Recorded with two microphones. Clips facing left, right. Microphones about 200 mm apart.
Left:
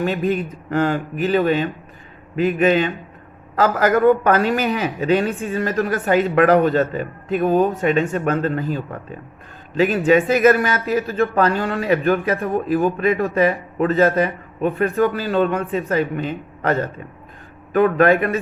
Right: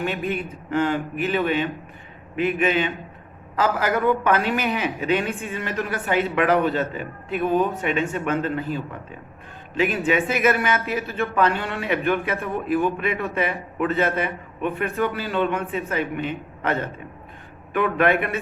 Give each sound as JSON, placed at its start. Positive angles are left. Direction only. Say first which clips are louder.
{"t": 0.0, "sound": "speech", "louder": "left 6 dB", "side_deg": 35}